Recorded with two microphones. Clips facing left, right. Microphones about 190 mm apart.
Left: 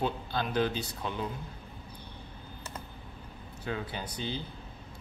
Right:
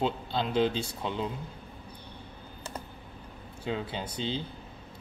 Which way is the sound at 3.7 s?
25° right (ahead or behind).